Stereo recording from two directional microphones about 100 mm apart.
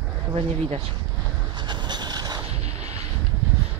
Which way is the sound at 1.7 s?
45° right (ahead or behind).